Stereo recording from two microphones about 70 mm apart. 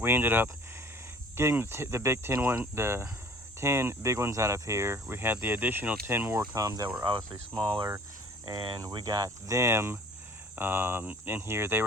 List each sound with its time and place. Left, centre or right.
0.0 s cricket: right
6.4 s speech: right
8.5 s speech: right
9.6 s cricket: right